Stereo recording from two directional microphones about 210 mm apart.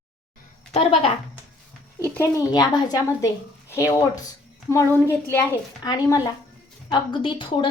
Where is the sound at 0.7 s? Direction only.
30° left (ahead or behind).